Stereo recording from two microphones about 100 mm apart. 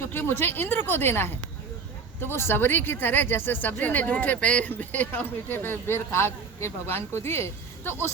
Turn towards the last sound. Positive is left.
turn(degrees=25)  # may be behind; listen again after turning